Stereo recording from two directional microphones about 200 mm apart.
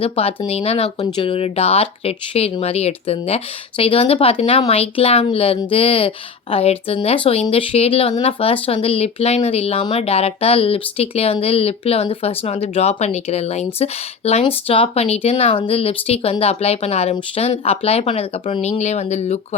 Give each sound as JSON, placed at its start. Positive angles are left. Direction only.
{"t": 0.0, "sound": "speech", "side_deg": 30}